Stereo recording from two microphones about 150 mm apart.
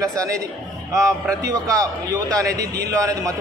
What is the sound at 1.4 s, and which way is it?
A man's voice, 20° right (ahead or behind).